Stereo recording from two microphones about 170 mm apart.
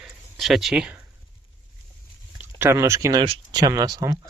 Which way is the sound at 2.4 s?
15° right (ahead or behind).